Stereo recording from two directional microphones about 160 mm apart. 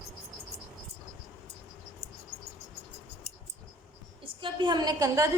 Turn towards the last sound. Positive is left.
turn(degrees=-20)  # may be behind; listen again after turning